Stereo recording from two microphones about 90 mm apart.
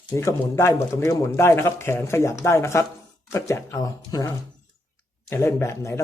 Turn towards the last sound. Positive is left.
turn(degrees=30)  # may be behind; listen again after turning